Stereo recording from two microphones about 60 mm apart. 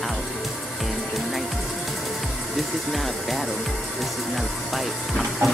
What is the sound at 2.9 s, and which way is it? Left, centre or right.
Speech, centre.